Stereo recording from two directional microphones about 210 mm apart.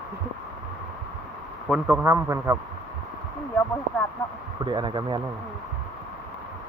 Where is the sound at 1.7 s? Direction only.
10° right (ahead or behind).